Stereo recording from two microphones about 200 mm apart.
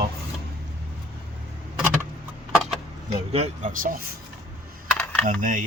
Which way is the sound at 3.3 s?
30° right (ahead or behind).